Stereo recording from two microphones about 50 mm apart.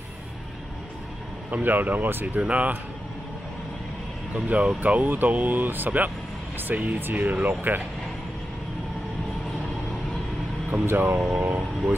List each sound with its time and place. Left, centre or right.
1.5 s speech: right
2.2 s speech: right
4.5 s speech: right
10.7 s speech: right
11.1 s speech: centre